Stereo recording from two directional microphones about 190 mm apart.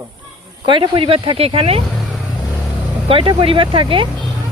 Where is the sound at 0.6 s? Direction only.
25° right (ahead or behind).